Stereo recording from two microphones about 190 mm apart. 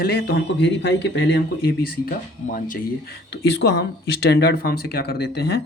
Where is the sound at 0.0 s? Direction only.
60° left (ahead or behind).